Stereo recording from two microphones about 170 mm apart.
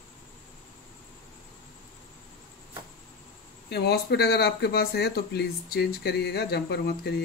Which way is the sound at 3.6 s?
75° left (ahead or behind).